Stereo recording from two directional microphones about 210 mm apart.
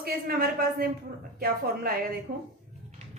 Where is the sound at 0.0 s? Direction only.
45° right (ahead or behind).